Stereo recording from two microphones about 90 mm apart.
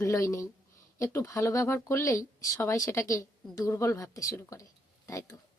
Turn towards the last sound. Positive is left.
turn(degrees=35)  # may be behind; listen again after turning